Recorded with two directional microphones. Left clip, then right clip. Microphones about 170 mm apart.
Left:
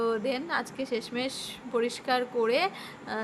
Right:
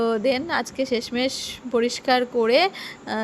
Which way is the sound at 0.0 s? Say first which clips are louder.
Right 7 dB; 35° right (ahead or behind).